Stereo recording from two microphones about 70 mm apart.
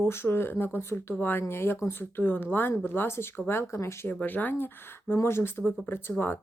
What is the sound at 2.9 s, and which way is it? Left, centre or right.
Speech, left.